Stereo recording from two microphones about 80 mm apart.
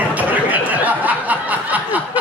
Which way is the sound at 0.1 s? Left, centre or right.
Centre.